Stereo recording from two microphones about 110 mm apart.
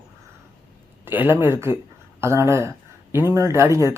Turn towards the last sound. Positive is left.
turn(degrees=-25)  # may be behind; listen again after turning